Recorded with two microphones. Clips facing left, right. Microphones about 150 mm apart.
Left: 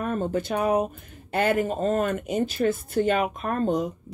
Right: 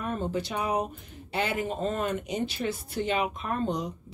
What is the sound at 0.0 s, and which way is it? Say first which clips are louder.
Speech: left 4 dB; 50° left (ahead or behind).